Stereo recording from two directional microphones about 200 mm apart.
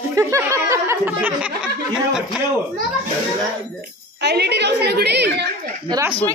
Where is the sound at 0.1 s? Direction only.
15° right (ahead or behind).